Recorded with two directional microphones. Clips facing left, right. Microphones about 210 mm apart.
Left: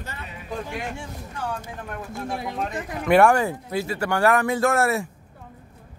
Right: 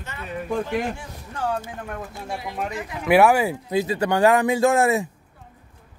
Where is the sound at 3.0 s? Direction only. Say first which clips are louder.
Right 1 dB; 5° right (ahead or behind).